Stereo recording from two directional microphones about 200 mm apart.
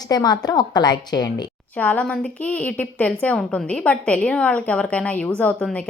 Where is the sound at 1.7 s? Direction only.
10° left (ahead or behind).